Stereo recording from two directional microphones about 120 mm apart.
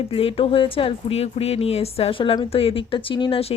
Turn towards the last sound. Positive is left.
turn(degrees=55)  # may be behind; listen again after turning